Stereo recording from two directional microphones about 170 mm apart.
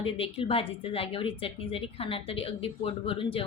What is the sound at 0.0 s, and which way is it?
A woman's voice, 30° left (ahead or behind).